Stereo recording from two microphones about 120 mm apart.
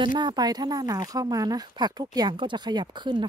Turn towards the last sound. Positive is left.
turn(degrees=-40)  # may be behind; listen again after turning